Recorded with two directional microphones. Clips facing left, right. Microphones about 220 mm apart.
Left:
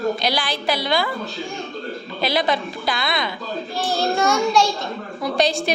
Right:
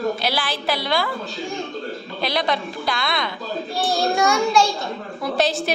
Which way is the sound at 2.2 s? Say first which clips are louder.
Left 2 dB; 5° left (ahead or behind).